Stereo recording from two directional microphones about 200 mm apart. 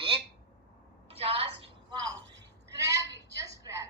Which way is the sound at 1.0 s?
30° right (ahead or behind).